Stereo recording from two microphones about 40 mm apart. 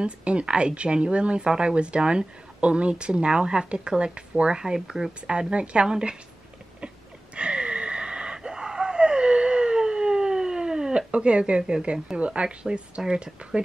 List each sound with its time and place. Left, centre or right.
0.0 s speech: right
1.5 s speech: centre
1.8 s speech: right
7.3 s wheeze: right
13.0 s speech: centre